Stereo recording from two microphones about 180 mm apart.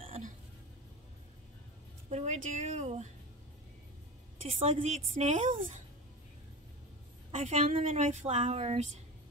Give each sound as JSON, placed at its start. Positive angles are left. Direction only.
{"t": 0.0, "sound": "a sound", "side_deg": -35}
{"t": 2.0, "sound": "speech", "side_deg": -40}
{"t": 4.6, "sound": "speech", "side_deg": -40}
{"t": 7.2, "sound": "speech", "side_deg": -40}